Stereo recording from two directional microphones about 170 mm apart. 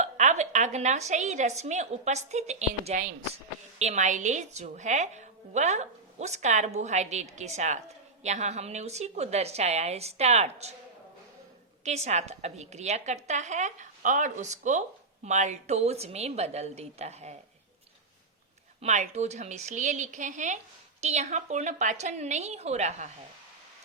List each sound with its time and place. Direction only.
0.0 s a woman's voice: 45° right (ahead or behind)
11.9 s a woman's voice: 40° right (ahead or behind)
18.8 s a woman's voice: 40° right (ahead or behind)